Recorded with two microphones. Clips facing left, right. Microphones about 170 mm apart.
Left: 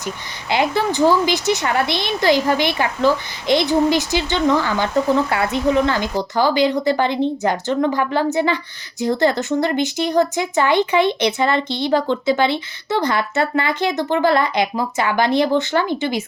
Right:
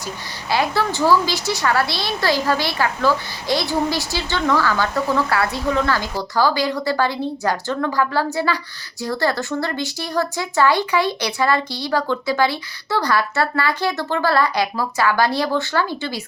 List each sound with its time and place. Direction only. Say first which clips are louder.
0.5 s a woman's voice: left 2 dB; 20° left (ahead or behind)